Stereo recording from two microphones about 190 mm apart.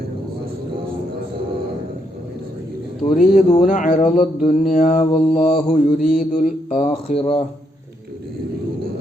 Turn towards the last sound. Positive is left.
turn(degrees=30)  # may be behind; listen again after turning